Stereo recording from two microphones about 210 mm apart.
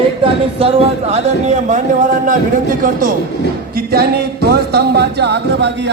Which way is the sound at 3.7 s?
45° right (ahead or behind).